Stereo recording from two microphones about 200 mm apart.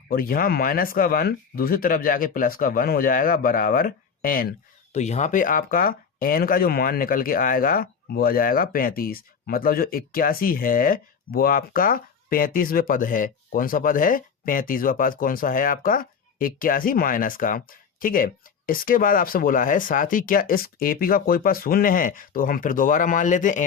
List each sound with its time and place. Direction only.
0.1 s speech: 45° left (ahead or behind)
4.9 s speech: 35° left (ahead or behind)